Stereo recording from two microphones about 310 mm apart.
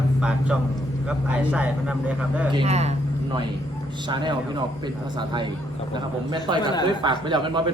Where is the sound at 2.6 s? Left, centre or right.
Right.